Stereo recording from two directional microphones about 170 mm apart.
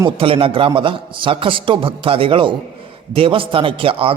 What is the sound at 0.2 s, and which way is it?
A man's voice, 35° right (ahead or behind).